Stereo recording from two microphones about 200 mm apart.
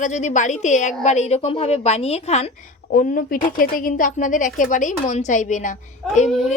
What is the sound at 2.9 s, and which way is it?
A woman's voice, 45° left (ahead or behind).